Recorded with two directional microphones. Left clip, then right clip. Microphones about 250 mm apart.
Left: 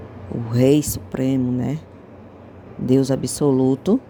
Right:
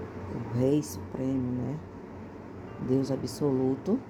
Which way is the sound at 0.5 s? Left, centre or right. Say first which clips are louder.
Left 11 dB; left.